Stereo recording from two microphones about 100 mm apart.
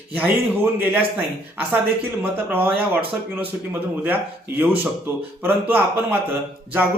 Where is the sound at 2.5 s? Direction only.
20° right (ahead or behind).